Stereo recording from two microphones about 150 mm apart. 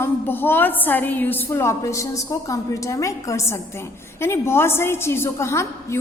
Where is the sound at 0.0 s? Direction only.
15° left (ahead or behind).